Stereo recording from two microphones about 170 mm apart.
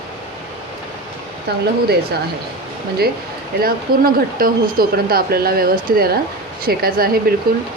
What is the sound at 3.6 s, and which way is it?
Speech, 60° right (ahead or behind).